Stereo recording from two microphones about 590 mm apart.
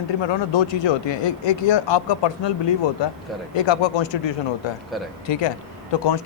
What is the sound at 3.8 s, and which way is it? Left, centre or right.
Speech, left.